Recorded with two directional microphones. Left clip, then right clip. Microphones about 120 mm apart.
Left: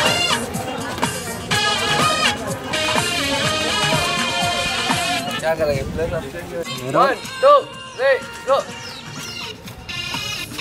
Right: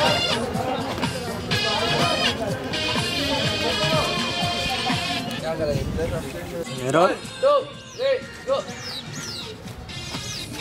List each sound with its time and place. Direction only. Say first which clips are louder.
0.0 s music: left 3 dB; 20° left (ahead or behind)
7.0 s music: left 4 dB; 20° left (ahead or behind)